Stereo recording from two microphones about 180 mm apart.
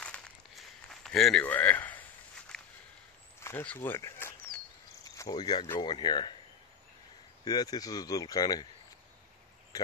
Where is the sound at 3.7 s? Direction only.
10° left (ahead or behind).